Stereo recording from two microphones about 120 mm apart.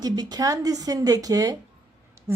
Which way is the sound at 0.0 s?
35° right (ahead or behind).